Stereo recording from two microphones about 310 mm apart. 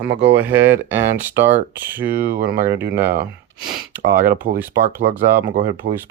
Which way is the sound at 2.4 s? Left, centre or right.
Right.